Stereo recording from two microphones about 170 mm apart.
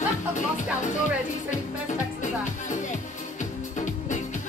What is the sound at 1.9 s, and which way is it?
Music, 50° left (ahead or behind).